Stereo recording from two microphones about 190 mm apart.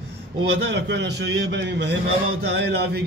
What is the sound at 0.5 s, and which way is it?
A man's voice, 60° right (ahead or behind).